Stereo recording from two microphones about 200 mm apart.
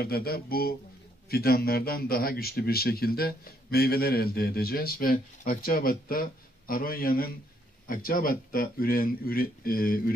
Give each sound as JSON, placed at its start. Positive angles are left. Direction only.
{"t": 0.0, "sound": "a man's voice", "side_deg": 50}